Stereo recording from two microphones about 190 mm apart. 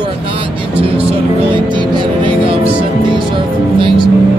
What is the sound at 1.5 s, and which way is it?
Music, 25° right (ahead or behind).